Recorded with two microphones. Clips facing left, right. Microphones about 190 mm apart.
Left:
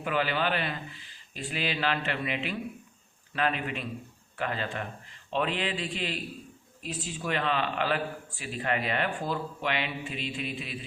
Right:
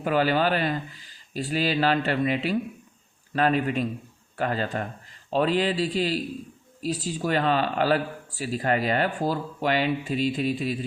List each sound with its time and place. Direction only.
0.0 s speech: 40° right (ahead or behind)